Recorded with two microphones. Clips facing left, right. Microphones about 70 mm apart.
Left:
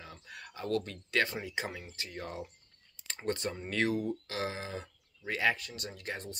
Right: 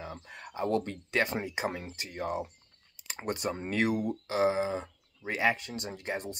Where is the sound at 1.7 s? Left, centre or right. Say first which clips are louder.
Right 6 dB; right.